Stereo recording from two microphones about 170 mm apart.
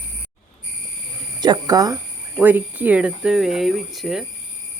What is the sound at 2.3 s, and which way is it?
Speech, 10° right (ahead or behind).